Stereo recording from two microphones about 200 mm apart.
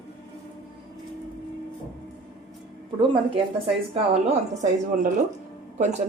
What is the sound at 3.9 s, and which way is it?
Speech, 30° right (ahead or behind).